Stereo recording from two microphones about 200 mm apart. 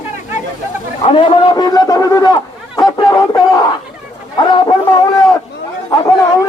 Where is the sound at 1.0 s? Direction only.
30° left (ahead or behind).